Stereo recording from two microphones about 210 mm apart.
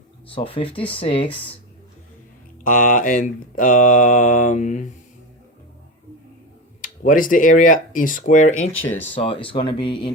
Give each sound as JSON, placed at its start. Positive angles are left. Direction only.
{"t": 0.3, "sound": "speech", "side_deg": 25}
{"t": 2.6, "sound": "mantra", "side_deg": 40}
{"t": 6.8, "sound": "mantra", "side_deg": 40}
{"t": 9.1, "sound": "speech", "side_deg": 25}